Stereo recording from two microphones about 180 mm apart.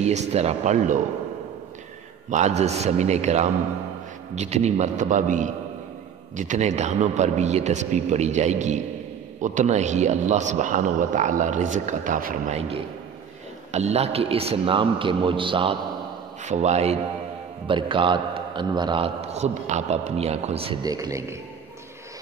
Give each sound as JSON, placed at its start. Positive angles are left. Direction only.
{"t": 0.0, "sound": "a man's voice", "side_deg": -40}
{"t": 2.3, "sound": "a man's voice", "side_deg": -40}
{"t": 12.5, "sound": "a man's voice", "side_deg": -35}
{"t": 16.4, "sound": "a man's voice", "side_deg": -40}
{"t": 20.8, "sound": "a man's voice", "side_deg": -20}